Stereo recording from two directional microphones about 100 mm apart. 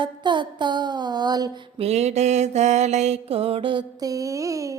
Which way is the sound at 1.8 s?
90° right.